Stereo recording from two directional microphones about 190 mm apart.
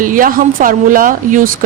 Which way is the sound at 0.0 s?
45° right (ahead or behind).